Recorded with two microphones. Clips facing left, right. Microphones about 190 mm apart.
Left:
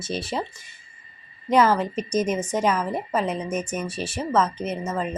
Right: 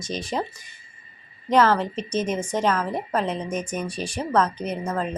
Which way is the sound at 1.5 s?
10° left (ahead or behind).